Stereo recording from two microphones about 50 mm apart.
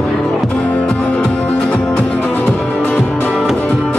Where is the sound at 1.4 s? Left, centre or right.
Left.